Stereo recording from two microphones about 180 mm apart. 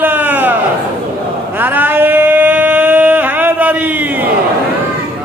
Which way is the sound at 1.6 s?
10° right (ahead or behind).